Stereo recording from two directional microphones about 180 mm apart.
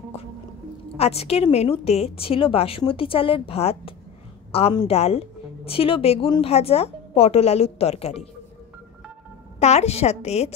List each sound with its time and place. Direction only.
0.9 s a woman's voice: 35° left (ahead or behind)
9.6 s a woman's voice: 35° left (ahead or behind)